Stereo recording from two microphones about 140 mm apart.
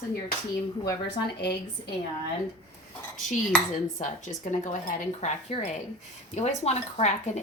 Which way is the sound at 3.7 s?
65° left (ahead or behind).